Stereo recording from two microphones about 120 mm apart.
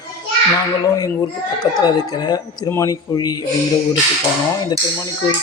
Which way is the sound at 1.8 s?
35° left (ahead or behind).